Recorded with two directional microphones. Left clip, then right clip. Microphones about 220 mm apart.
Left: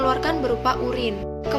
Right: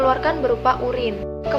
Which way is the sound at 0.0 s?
45° left (ahead or behind).